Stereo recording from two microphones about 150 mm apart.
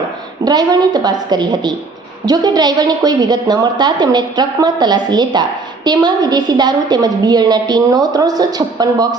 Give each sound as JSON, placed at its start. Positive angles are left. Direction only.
{"t": 0.4, "sound": "a woman's voice", "side_deg": -25}